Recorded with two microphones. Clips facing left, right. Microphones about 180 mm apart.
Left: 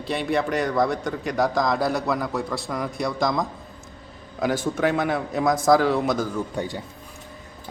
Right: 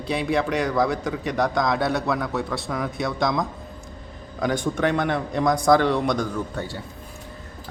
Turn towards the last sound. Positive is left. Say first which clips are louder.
# left 2 dB
turn(degrees=15)  # may be behind; listen again after turning